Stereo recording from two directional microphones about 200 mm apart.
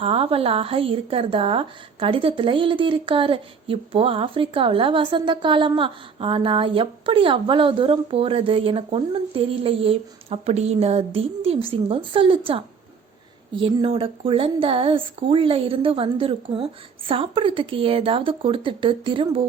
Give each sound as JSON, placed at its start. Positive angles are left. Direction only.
{"t": 0.0, "sound": "a woman's voice", "side_deg": -30}